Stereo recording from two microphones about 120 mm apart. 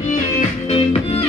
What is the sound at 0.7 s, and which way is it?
Music, 50° left (ahead or behind).